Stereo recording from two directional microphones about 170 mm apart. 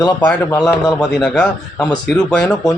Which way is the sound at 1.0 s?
5° left (ahead or behind).